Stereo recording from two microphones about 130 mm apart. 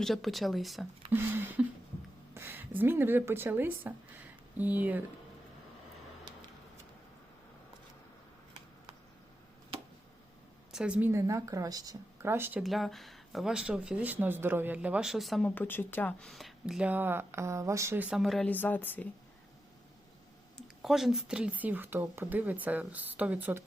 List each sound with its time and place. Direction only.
0.0 s speech: centre (ahead or behind)
1.1 s a sound: 15° right (ahead or behind)
2.3 s a woman's voice: 20° right (ahead or behind)
10.7 s a woman's voice: 5° right (ahead or behind)
11.1 s speech: 25° right (ahead or behind)
12.5 s a woman's voice: centre (ahead or behind)
15.4 s speech: 15° left (ahead or behind)
16.3 s a woman's voice: centre (ahead or behind)
18.2 s speech: centre (ahead or behind)
18.4 s speech: 15° left (ahead or behind)
20.6 s a woman's voice: centre (ahead or behind)